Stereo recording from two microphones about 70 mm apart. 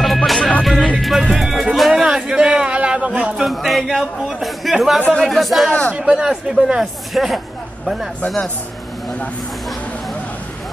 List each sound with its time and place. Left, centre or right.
0.0 s music: centre
0.4 s music: centre
0.9 s music: centre
3.4 s speech: centre
5.7 s speech: centre
5.9 s speech: centre